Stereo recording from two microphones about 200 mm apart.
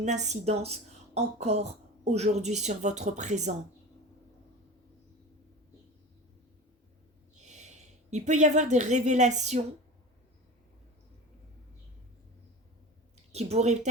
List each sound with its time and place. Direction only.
0.0 s a woman's voice: 35° right (ahead or behind)
7.4 s speech: 35° right (ahead or behind)
13.3 s a woman's voice: 35° right (ahead or behind)